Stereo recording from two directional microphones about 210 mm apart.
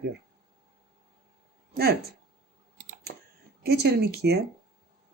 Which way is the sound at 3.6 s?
50° right (ahead or behind).